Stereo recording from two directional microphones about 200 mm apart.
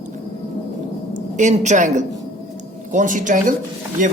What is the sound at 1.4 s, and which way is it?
A man's voice, 35° right (ahead or behind).